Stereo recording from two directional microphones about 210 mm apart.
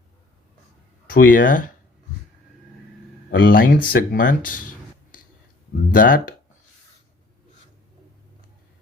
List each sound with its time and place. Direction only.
1.1 s speech: 40° left (ahead or behind)
3.3 s speech: 45° left (ahead or behind)
5.9 s speech: 40° left (ahead or behind)